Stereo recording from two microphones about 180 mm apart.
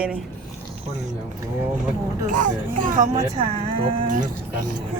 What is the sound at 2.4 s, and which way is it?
Speech, 45° right (ahead or behind).